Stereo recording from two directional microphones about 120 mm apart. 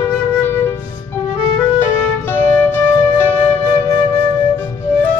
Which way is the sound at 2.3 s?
20° left (ahead or behind).